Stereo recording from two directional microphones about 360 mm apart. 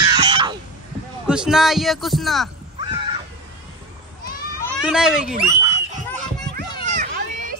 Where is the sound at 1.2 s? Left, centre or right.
Centre.